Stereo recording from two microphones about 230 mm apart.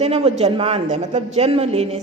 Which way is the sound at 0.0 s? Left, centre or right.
Right.